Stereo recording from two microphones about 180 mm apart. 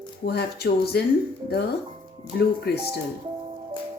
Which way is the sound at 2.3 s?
60° left (ahead or behind).